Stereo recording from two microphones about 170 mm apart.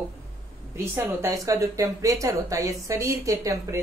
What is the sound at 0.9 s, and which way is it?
Speech, 15° right (ahead or behind).